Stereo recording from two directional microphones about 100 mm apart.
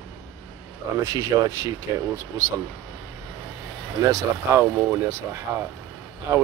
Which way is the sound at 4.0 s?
35° right (ahead or behind).